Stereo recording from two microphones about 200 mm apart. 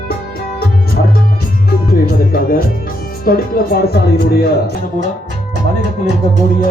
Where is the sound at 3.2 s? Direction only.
50° left (ahead or behind).